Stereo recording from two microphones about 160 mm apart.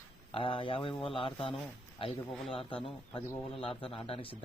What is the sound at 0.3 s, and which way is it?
Speech, 35° left (ahead or behind).